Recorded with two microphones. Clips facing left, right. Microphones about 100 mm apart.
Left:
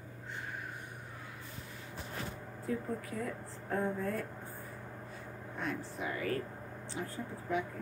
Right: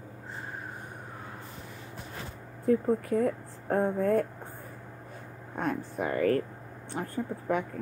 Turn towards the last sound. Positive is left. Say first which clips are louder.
# right 6 dB
turn(degrees=-55)  # may be behind; listen again after turning